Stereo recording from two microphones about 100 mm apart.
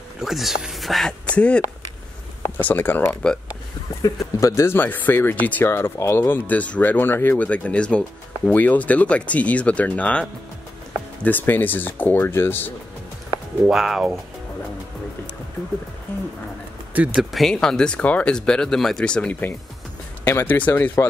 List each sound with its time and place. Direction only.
0.2 s speech: 5° right (ahead or behind)
1.3 s speech: 10° left (ahead or behind)
11.2 s speech: 20° left (ahead or behind)
13.7 s speech: centre (ahead or behind)
16.9 s speech: 15° right (ahead or behind)
17.2 s speech: centre (ahead or behind)
20.2 s speech: 20° left (ahead or behind)